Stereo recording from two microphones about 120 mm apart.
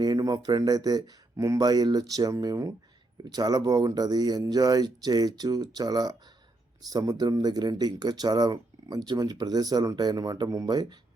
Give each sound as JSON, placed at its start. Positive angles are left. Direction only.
{"t": 0.0, "sound": "speech", "side_deg": -35}